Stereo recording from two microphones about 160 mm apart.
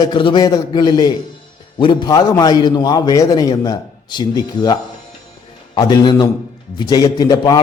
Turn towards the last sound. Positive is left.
turn(degrees=25)  # may be behind; listen again after turning